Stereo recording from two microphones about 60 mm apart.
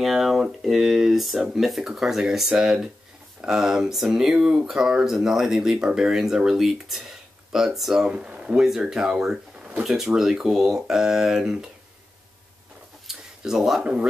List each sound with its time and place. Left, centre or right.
0.0 s speech: centre
8.1 s speech: centre
13.0 s a sound: centre